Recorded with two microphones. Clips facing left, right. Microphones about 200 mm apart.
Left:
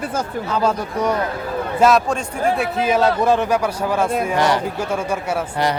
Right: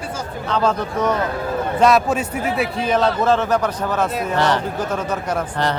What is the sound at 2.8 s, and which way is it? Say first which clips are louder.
Speech: left 1 dB; 10° left (ahead or behind).